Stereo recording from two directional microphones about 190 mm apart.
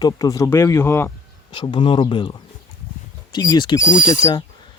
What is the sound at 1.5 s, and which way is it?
Speech, 25° left (ahead or behind).